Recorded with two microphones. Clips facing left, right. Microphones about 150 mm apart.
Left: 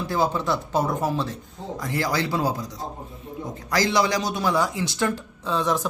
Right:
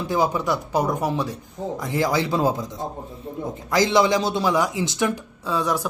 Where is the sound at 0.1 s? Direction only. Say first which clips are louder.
Right 2 dB; 15° right (ahead or behind).